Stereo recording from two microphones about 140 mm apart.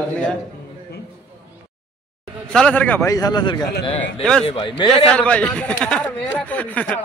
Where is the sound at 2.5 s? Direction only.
5° left (ahead or behind).